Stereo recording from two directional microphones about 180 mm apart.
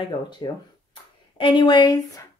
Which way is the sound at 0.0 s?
25° left (ahead or behind).